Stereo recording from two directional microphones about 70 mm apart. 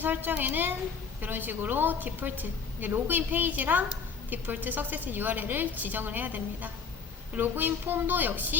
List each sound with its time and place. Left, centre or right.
0.0 s a woman's voice: right